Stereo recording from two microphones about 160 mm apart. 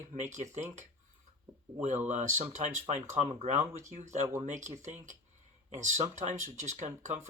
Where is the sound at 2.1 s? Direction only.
50° right (ahead or behind).